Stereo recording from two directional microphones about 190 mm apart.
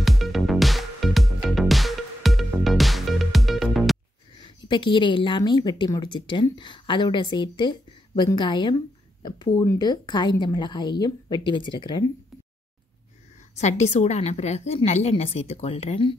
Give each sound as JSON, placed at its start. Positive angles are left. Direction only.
{"t": 0.0, "sound": "music", "side_deg": 0}
{"t": 4.4, "sound": "a woman's voice", "side_deg": 25}
{"t": 13.6, "sound": "a woman's voice", "side_deg": 35}